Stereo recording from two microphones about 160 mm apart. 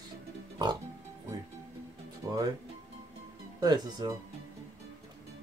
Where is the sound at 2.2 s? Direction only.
20° right (ahead or behind).